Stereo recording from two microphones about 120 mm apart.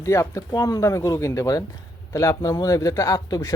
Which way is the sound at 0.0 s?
25° left (ahead or behind).